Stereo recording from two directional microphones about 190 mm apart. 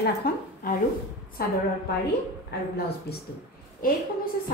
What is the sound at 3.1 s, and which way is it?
Speech, 60° left (ahead or behind).